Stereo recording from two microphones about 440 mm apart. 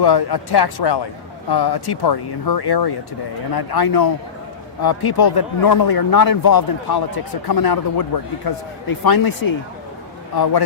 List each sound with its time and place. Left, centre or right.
0.0 s speech: left